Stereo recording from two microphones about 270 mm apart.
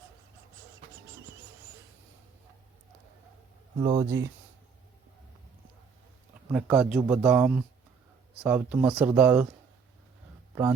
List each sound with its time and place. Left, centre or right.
3.8 s speech: centre
6.5 s speech: centre
10.5 s speech: centre